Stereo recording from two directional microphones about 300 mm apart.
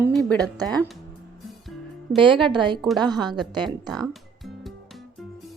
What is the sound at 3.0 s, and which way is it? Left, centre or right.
Speech, centre.